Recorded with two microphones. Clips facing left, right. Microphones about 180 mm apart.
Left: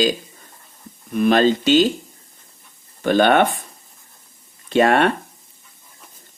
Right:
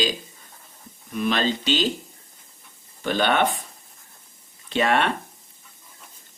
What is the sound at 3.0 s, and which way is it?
Speech, 50° left (ahead or behind).